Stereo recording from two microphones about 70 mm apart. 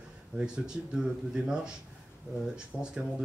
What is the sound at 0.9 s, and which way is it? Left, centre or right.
Speech, centre.